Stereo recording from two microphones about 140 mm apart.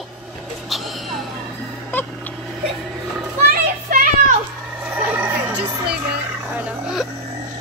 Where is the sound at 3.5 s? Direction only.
75° right (ahead or behind).